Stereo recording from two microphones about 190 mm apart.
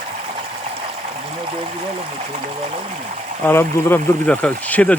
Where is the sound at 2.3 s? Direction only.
35° right (ahead or behind).